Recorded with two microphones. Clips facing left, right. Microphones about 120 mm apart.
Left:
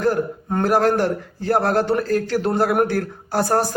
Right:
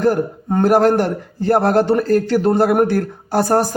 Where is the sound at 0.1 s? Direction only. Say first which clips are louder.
Right 3 dB; 50° right (ahead or behind).